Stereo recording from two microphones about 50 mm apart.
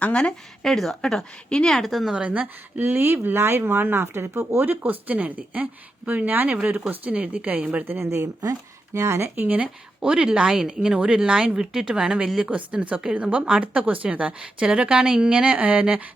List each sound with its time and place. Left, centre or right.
0.0 s a woman's voice: left
1.8 s speech: centre
2.1 s speech: right
2.8 s speech: right
4.6 s a woman's voice: right
7.9 s speech: right
8.9 s speech: right
9.6 s a woman's voice: right